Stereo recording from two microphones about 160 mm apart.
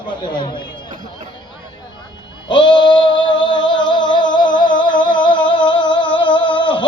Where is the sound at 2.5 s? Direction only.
30° left (ahead or behind).